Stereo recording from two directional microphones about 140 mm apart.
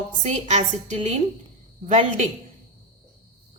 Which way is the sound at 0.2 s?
60° right (ahead or behind).